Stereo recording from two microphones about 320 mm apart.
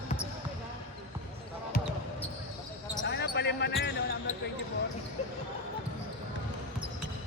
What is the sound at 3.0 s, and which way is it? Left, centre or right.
Basketball bounce, left.